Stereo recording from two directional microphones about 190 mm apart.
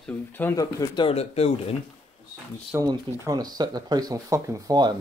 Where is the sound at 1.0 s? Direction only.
30° left (ahead or behind).